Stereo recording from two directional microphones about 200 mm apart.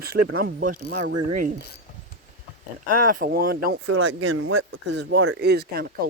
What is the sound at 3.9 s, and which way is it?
Speech, 90° right.